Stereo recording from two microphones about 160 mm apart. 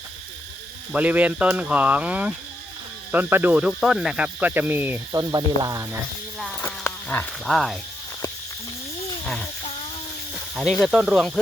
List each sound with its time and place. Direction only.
0.9 s speech: 10° right (ahead or behind)
5.1 s speech: 20° right (ahead or behind)
6.6 s insect: 15° left (ahead or behind)
7.4 s speech: centre (ahead or behind)
10.5 s speech: centre (ahead or behind)